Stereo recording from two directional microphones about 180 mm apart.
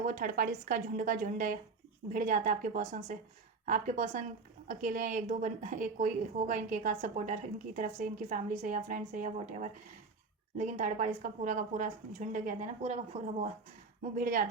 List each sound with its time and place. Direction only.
0.0 s a woman's voice: 45° right (ahead or behind)